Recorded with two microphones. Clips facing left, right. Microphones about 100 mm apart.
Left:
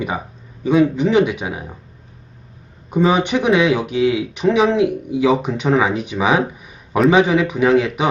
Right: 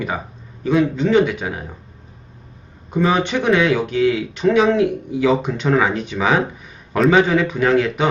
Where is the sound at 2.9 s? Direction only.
15° left (ahead or behind).